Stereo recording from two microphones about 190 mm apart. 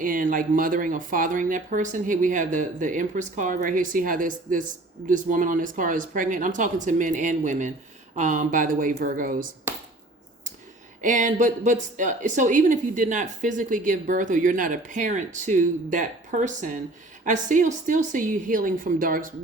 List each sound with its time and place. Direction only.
0.0 s speech: 45° right (ahead or behind)
11.0 s speech: 40° right (ahead or behind)